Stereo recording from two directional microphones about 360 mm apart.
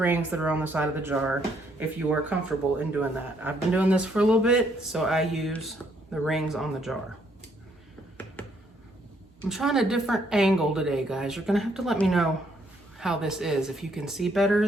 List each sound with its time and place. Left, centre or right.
0.0 s speech: centre
2.3 s speech: centre
9.4 s speech: centre